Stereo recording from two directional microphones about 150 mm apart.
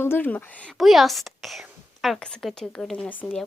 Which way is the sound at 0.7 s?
Centre (ahead or behind).